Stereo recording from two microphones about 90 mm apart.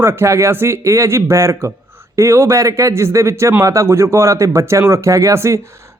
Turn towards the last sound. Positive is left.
turn(degrees=-30)  # may be behind; listen again after turning